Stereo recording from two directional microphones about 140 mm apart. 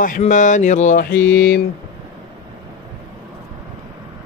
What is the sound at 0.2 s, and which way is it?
Mantra, 60° left (ahead or behind).